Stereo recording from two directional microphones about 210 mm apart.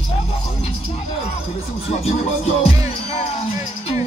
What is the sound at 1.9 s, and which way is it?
Music, 30° left (ahead or behind).